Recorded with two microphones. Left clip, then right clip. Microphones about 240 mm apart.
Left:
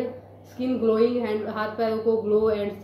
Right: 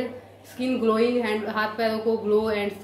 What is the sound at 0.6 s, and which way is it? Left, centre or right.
A woman's voice, centre.